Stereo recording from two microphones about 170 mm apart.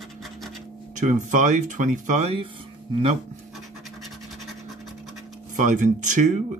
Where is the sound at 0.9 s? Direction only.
45° right (ahead or behind).